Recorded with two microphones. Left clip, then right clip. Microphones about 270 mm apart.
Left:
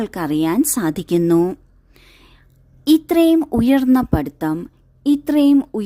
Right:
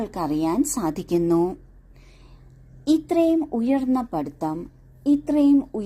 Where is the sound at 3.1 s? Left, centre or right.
Left.